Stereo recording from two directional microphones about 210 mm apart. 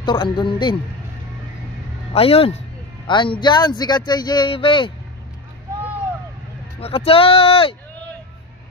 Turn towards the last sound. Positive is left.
turn(degrees=25)  # may be behind; listen again after turning